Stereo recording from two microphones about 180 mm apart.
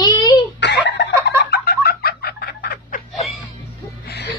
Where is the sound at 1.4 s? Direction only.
65° left (ahead or behind).